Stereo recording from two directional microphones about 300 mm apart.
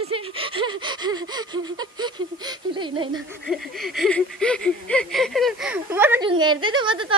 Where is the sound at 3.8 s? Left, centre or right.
Centre.